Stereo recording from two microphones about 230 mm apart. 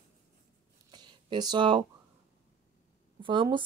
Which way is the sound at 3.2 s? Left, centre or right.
Right.